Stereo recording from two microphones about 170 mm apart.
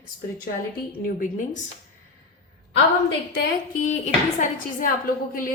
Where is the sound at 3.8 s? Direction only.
45° left (ahead or behind).